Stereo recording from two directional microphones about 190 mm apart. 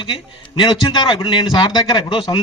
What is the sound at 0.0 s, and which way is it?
A man's voice, 25° left (ahead or behind).